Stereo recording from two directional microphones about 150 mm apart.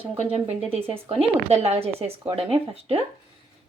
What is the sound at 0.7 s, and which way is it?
A woman's voice, 40° right (ahead or behind).